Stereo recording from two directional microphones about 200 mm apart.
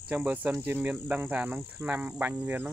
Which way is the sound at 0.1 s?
10° right (ahead or behind).